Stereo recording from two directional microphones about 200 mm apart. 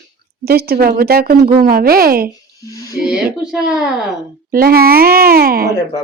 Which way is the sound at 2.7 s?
15° left (ahead or behind).